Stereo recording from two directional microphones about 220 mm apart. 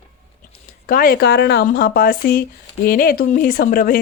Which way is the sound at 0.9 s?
40° left (ahead or behind).